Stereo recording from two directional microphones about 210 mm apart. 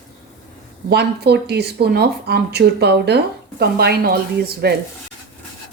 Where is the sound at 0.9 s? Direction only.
50° right (ahead or behind).